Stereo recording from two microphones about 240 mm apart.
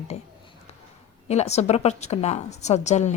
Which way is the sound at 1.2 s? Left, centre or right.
Left.